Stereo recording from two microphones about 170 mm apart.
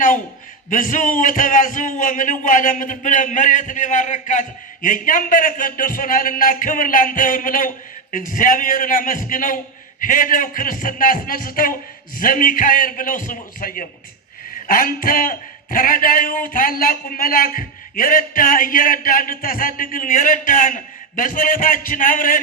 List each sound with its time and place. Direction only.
0.7 s a man's voice: 50° left (ahead or behind)